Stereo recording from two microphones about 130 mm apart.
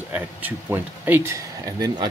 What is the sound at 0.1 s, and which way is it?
Speech, 15° right (ahead or behind).